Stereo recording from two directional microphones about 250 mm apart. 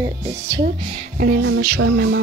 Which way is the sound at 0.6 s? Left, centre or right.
Right.